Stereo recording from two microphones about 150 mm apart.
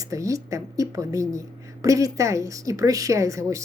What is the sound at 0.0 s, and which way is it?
A woman's voice, 20° right (ahead or behind).